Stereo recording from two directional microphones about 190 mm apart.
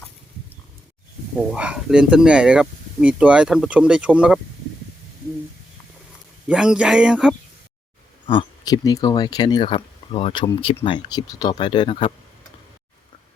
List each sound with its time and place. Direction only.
1.4 s speech: 5° right (ahead or behind)
6.5 s speech: 5° right (ahead or behind)
8.3 s speech: 25° left (ahead or behind)